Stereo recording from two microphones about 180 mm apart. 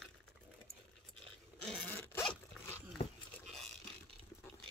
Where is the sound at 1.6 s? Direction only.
5° left (ahead or behind).